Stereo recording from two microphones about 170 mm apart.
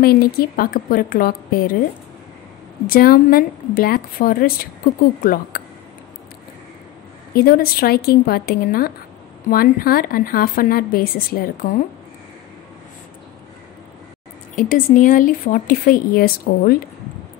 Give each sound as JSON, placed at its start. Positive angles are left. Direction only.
{"t": 0.0, "sound": "speech", "side_deg": 65}
{"t": 2.9, "sound": "speech", "side_deg": 60}
{"t": 7.3, "sound": "speech", "side_deg": 60}
{"t": 14.5, "sound": "speech", "side_deg": 50}